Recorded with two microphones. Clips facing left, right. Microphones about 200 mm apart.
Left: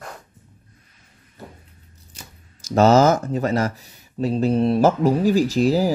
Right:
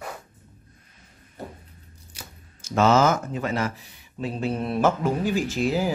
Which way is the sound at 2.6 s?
40° left (ahead or behind).